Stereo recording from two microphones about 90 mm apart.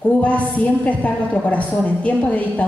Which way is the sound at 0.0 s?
15° left (ahead or behind).